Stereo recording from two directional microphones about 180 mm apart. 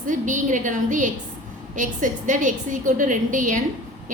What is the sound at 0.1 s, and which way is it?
A woman's voice, 45° right (ahead or behind).